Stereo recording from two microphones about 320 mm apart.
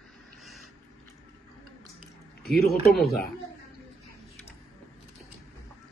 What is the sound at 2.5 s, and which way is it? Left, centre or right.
Speech, left.